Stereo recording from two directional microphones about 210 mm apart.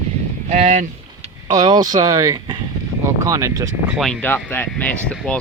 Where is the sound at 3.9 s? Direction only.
Centre (ahead or behind).